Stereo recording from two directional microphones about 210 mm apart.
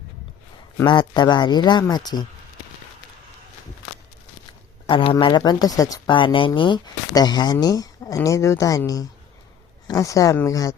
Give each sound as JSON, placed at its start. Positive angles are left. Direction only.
{"t": 0.9, "sound": "speech", "side_deg": 20}
{"t": 4.9, "sound": "speech", "side_deg": 25}